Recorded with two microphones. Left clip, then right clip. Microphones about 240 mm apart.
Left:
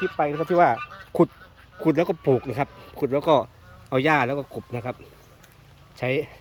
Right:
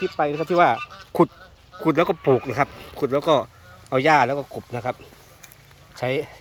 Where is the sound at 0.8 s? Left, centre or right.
Right.